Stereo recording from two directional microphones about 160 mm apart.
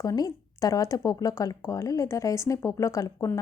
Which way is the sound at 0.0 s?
20° left (ahead or behind).